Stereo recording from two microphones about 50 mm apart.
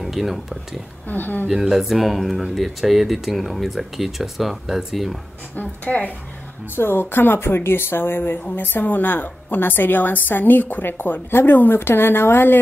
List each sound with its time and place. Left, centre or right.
0.0 s speech: centre
1.0 s a woman's voice: left
1.5 s speech: centre
5.6 s a woman's voice: left
6.7 s a woman's voice: left